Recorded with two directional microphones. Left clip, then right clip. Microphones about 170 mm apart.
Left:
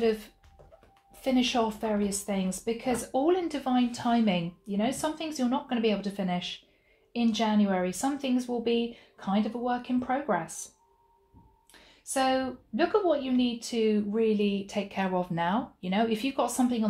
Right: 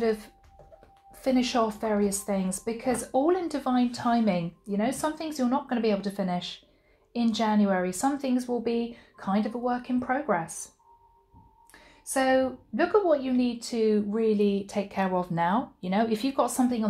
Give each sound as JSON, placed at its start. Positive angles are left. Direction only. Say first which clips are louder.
{"t": 0.0, "sound": "speech", "louder": "even", "side_deg": -20}
{"t": 1.5, "sound": "speech", "louder": "right 2 dB", "side_deg": -25}
{"t": 12.1, "sound": "speech", "louder": "right 3 dB", "side_deg": -25}